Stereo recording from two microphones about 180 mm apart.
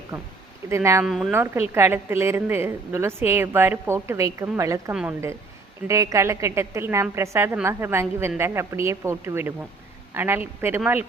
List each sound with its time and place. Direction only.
0.1 s a woman's voice: 10° right (ahead or behind)
1.0 s a woman's voice: centre (ahead or behind)
1.3 s a woman's voice: 10° right (ahead or behind)